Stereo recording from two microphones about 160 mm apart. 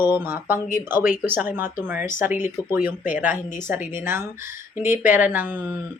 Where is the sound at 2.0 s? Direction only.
55° left (ahead or behind).